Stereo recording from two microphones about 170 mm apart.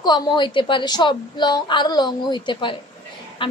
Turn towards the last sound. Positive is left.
turn(degrees=30)  # may be behind; listen again after turning